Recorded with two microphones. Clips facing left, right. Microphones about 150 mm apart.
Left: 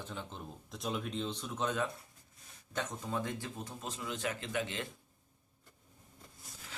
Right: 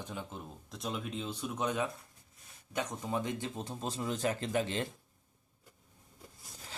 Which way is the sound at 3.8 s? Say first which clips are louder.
Right 5 dB; 35° right (ahead or behind).